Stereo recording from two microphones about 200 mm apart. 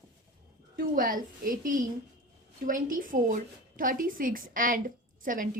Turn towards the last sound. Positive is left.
turn(degrees=-45)  # may be behind; listen again after turning